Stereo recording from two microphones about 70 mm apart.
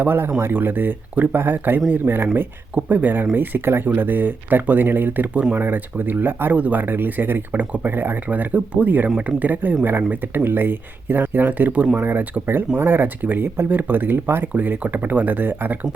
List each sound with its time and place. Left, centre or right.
0.0 s speech: right
5.5 s speech: right
11.9 s speech: right